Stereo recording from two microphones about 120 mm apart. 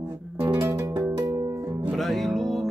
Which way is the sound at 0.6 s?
20° right (ahead or behind).